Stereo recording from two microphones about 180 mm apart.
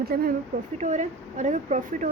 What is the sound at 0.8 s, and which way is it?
Speech, 40° right (ahead or behind).